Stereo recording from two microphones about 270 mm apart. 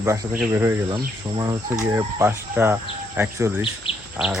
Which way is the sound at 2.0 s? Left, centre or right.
Centre.